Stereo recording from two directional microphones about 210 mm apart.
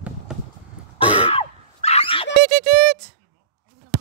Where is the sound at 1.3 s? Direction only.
30° left (ahead or behind).